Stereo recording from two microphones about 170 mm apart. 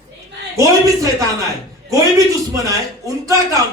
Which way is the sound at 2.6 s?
20° right (ahead or behind).